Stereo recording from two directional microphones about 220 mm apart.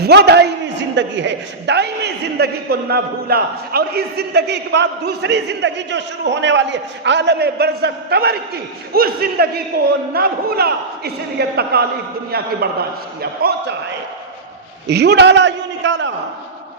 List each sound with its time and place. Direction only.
0.0 s a man's voice: 50° right (ahead or behind)
14.8 s a man's voice: 50° right (ahead or behind)